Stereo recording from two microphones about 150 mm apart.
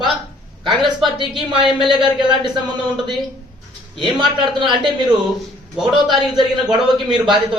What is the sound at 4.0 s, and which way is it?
A woman's voice, 30° right (ahead or behind).